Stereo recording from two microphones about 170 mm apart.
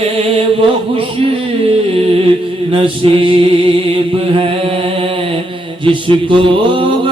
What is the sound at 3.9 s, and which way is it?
Mantra, 30° right (ahead or behind).